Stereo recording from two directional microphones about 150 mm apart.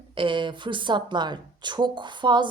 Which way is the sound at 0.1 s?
35° right (ahead or behind).